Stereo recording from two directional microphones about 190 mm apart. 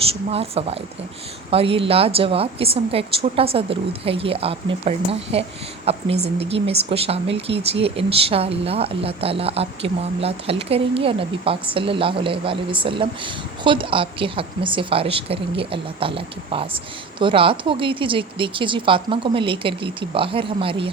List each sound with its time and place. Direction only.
0.3 s a woman's voice: 30° right (ahead or behind)